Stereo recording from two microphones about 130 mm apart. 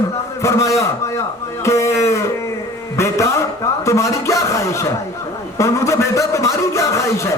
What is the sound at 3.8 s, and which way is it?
A man's voice, 25° left (ahead or behind).